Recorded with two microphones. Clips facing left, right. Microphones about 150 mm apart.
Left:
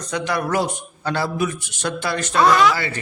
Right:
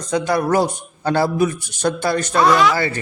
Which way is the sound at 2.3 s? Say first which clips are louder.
Even; centre (ahead or behind).